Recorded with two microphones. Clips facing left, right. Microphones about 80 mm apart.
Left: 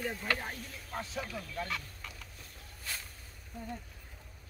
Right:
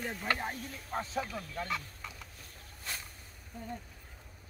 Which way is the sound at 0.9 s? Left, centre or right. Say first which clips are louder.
Right 4 dB; right.